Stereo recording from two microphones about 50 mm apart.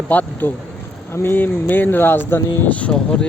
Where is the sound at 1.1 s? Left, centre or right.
Left.